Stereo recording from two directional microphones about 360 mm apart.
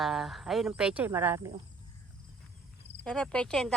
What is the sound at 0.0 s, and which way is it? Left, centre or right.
Speech, centre.